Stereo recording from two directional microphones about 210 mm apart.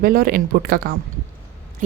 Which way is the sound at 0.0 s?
45° right (ahead or behind).